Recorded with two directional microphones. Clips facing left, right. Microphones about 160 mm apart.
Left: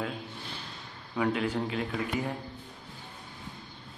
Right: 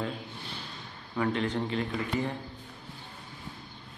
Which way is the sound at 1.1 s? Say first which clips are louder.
Even; 5° left (ahead or behind).